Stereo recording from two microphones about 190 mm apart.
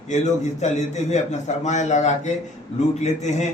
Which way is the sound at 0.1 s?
40° left (ahead or behind).